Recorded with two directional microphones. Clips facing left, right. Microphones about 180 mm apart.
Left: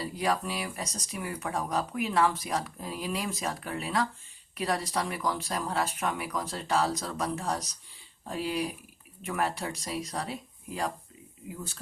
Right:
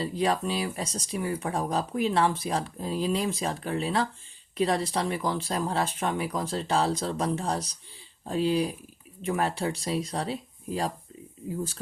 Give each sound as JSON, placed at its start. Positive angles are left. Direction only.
{"t": 0.0, "sound": "speech", "side_deg": -30}